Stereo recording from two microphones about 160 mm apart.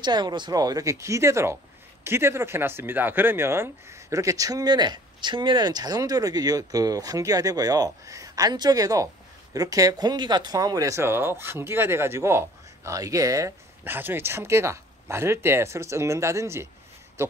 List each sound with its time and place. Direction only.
0.0 s speech: 30° right (ahead or behind)